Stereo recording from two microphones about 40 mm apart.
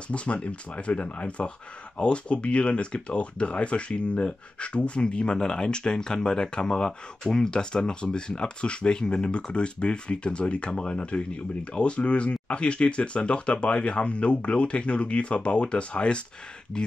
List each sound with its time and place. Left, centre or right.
0.1 s speech: left
16.7 s speech: centre